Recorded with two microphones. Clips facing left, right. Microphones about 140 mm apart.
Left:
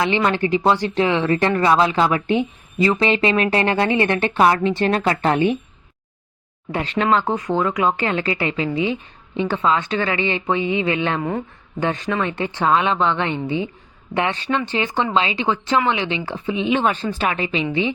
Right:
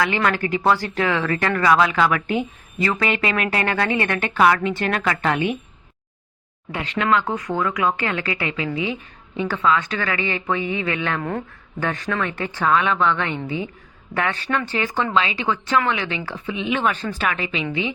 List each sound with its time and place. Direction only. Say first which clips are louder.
0.0 s speech: left 2 dB; 25° left (ahead or behind)
6.7 s speech: left 2 dB; 30° left (ahead or behind)
11.2 s speech: left 3 dB; 10° left (ahead or behind)
11.8 s speech: left 3 dB; 20° left (ahead or behind)